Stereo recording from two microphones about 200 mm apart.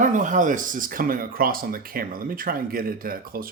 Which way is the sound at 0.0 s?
40° right (ahead or behind).